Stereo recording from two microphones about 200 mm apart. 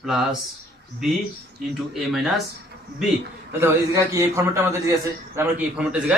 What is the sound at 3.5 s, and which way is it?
A man's voice, 10° right (ahead or behind).